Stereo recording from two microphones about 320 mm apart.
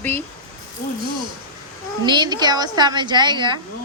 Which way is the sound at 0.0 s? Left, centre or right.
Centre.